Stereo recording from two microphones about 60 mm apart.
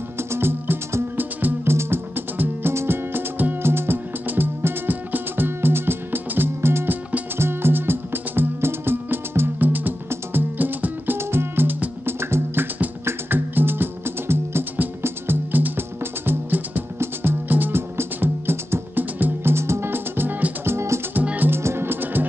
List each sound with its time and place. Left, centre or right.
0.3 s music: right
19.5 s music: right
20.6 s music: right
21.1 s music: right
21.5 s music: right